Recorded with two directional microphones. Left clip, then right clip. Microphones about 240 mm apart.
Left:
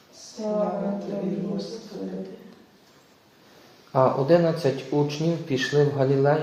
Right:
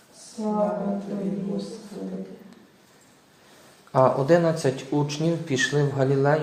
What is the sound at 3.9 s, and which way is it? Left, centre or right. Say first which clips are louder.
Speech: right 1 dB; right.